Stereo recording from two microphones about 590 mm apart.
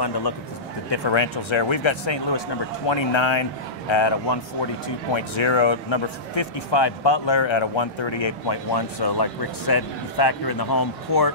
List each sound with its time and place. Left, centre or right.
0.8 s speech: left